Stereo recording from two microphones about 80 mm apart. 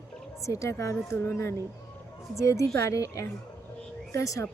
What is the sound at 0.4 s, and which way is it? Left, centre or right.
A woman's voice, left.